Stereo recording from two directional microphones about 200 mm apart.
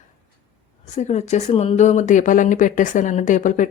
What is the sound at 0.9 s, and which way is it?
Speech, 35° left (ahead or behind).